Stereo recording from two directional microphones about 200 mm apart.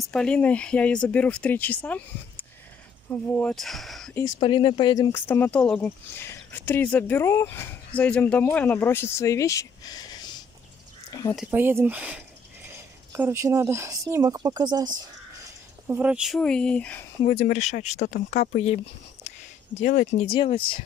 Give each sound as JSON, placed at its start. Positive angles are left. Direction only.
{"t": 0.0, "sound": "speech", "side_deg": 5}
{"t": 4.2, "sound": "speech", "side_deg": 25}
{"t": 11.3, "sound": "speech", "side_deg": -10}
{"t": 15.9, "sound": "speech", "side_deg": -5}
{"t": 17.2, "sound": "speech", "side_deg": 30}
{"t": 19.2, "sound": "a sound", "side_deg": 35}
{"t": 20.0, "sound": "speech", "side_deg": 30}